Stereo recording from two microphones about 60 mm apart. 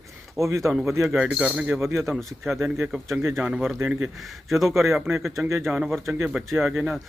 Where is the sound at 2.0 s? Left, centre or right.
Centre.